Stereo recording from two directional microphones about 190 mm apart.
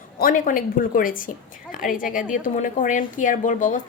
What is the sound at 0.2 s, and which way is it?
Speech, 45° left (ahead or behind).